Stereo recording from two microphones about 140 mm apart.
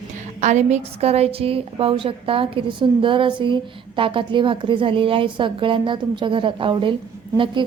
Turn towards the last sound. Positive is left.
turn(degrees=-35)  # may be behind; listen again after turning